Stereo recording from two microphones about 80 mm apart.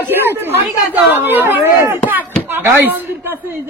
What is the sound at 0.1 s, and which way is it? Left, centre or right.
Speech, right.